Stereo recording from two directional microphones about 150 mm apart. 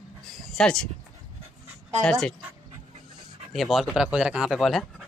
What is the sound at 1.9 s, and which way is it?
Speech, 5° left (ahead or behind).